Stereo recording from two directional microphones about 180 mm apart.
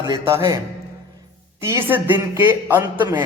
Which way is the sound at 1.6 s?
15° right (ahead or behind).